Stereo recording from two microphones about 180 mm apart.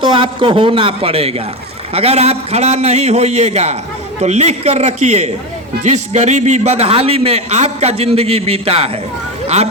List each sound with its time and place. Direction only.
0.0 s a man's voice: 30° right (ahead or behind)